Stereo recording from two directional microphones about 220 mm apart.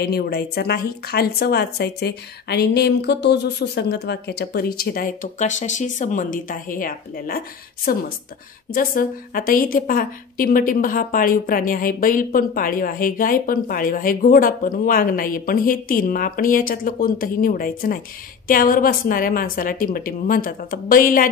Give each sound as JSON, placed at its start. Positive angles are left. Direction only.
{"t": 0.0, "sound": "a woman's voice", "side_deg": 45}